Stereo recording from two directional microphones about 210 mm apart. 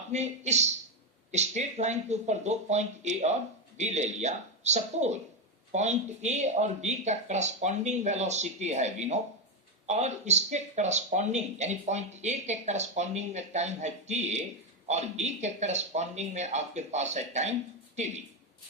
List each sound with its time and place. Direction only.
0.1 s speech: 35° right (ahead or behind)